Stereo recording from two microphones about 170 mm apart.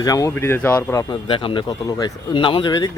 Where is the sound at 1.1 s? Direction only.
30° left (ahead or behind).